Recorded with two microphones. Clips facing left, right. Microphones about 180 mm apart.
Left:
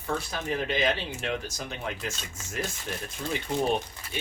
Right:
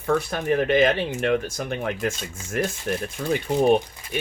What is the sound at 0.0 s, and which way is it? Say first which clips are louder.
Speech: right 8 dB; 55° right (ahead or behind).